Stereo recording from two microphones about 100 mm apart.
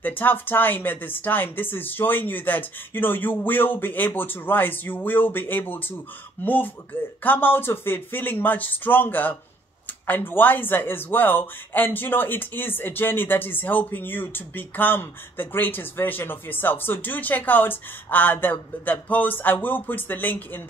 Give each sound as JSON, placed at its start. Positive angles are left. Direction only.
{"t": 0.0, "sound": "speech", "side_deg": 20}